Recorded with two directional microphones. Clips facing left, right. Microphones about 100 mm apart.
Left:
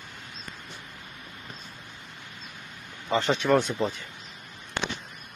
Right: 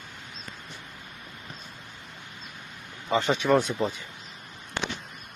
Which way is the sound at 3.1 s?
10° right (ahead or behind).